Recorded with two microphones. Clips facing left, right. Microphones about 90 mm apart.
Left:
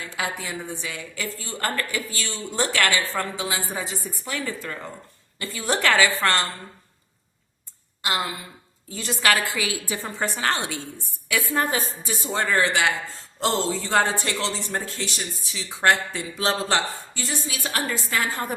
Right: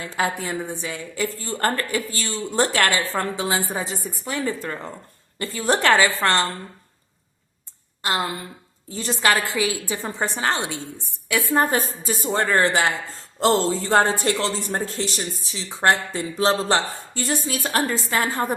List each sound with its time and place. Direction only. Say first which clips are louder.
0.0 s a woman's voice: right 5 dB; 40° right (ahead or behind)
8.9 s a woman's voice: right 2 dB; 30° right (ahead or behind)
17.2 s a woman's voice: right 7 dB; 55° right (ahead or behind)
17.5 s a woman's voice: right 4 dB; 40° right (ahead or behind)